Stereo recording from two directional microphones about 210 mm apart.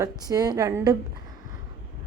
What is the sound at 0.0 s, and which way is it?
Speech, 15° right (ahead or behind).